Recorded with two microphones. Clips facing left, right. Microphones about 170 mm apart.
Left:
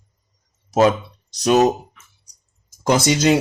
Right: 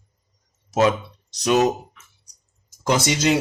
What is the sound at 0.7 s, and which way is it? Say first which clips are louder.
Speech: left 3 dB; 35° left (ahead or behind).